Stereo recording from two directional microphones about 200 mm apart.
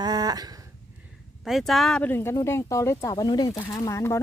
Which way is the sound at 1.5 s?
Centre (ahead or behind).